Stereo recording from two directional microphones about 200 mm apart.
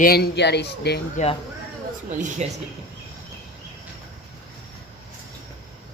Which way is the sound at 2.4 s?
35° right (ahead or behind).